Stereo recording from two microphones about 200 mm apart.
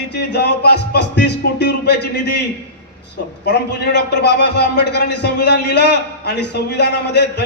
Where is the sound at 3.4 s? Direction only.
60° left (ahead or behind).